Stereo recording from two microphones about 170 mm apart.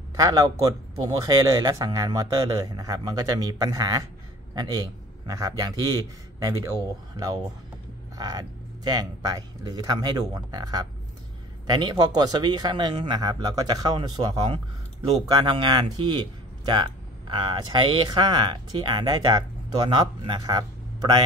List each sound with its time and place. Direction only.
0.1 s speech: 20° right (ahead or behind)